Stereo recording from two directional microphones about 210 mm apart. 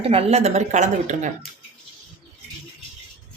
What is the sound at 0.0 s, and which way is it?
Speech, 30° right (ahead or behind).